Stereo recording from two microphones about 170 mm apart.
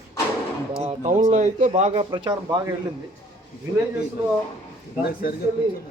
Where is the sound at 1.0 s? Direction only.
45° right (ahead or behind); by 2.7 s 25° right (ahead or behind).